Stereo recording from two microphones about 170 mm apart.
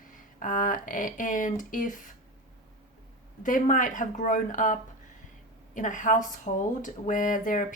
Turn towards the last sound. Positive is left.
turn(degrees=50)  # may be behind; listen again after turning